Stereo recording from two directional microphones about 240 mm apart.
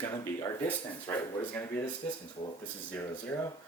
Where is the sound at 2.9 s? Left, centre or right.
Centre.